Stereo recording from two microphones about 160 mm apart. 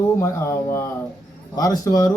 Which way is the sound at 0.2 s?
15° left (ahead or behind).